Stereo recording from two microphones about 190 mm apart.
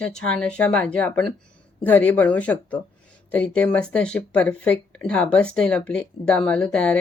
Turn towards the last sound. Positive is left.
turn(degrees=5)  # may be behind; listen again after turning